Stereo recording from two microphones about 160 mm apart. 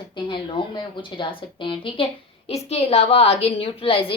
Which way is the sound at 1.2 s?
30° left (ahead or behind).